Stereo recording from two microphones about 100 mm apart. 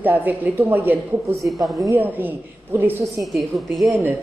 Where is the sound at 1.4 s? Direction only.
Centre (ahead or behind).